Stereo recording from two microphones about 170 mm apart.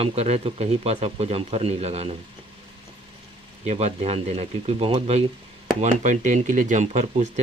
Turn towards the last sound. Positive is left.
turn(degrees=-45)  # may be behind; listen again after turning